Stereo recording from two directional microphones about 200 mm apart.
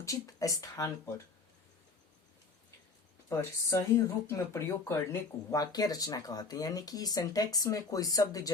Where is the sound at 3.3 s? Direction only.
15° left (ahead or behind).